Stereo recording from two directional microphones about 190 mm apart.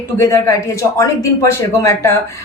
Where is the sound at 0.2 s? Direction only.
15° left (ahead or behind).